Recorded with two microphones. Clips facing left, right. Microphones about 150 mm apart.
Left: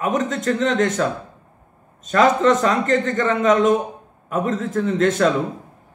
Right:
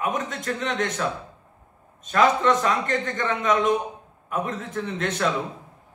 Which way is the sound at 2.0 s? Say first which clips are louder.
Left 4 dB; 45° left (ahead or behind).